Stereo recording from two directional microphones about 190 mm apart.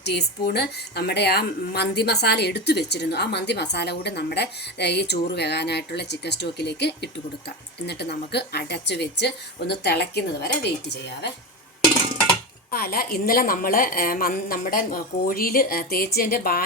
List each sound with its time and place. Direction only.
0.0 s a woman's voice: 60° left (ahead or behind)
12.7 s a woman's voice: 50° left (ahead or behind)